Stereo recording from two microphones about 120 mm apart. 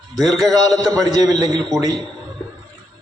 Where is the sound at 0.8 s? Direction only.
30° right (ahead or behind).